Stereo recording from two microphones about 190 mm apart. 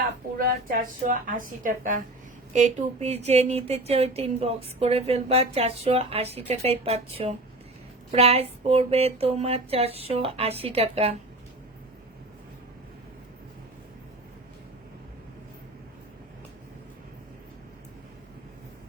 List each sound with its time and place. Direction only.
0.3 s a woman's voice: 45° right (ahead or behind); by 11.2 s 30° right (ahead or behind)